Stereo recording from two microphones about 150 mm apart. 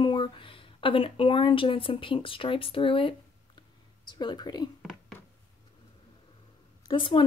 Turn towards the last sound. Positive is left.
turn(degrees=30)  # may be behind; listen again after turning